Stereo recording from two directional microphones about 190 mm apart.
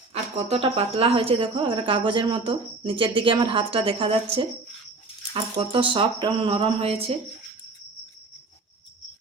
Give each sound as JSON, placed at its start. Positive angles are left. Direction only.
{"t": 0.1, "sound": "a woman's voice", "side_deg": -35}